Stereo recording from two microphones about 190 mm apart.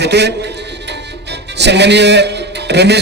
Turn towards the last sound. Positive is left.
turn(degrees=-60)  # may be behind; listen again after turning